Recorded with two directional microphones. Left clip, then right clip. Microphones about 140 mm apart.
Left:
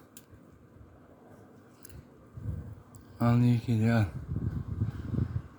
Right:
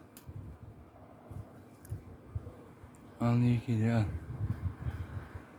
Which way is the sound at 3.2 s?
40° left (ahead or behind).